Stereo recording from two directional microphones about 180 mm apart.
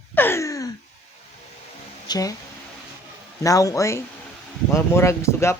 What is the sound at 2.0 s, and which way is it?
Speech, 20° left (ahead or behind).